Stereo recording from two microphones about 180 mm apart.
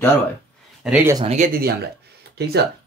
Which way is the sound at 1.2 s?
40° right (ahead or behind).